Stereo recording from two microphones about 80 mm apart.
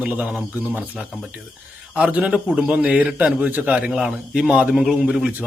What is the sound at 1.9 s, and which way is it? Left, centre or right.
A man's voice, centre.